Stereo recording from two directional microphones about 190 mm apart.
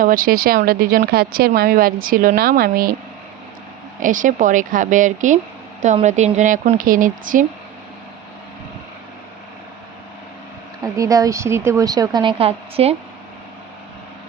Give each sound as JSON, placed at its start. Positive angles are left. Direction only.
{"t": 0.0, "sound": "speech", "side_deg": -45}
{"t": 4.0, "sound": "speech", "side_deg": -45}
{"t": 10.8, "sound": "speech", "side_deg": -15}